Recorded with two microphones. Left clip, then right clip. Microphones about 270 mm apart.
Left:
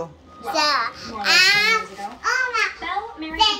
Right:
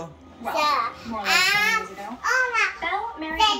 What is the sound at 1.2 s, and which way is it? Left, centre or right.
Speech, centre.